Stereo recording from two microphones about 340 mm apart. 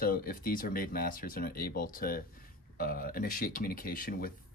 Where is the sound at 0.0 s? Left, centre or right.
Left.